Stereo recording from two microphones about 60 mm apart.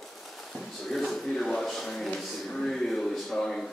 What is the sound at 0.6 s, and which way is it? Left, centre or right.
A man's voice, centre.